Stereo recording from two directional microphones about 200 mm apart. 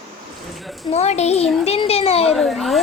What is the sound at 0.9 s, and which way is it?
A child's voice, 30° left (ahead or behind).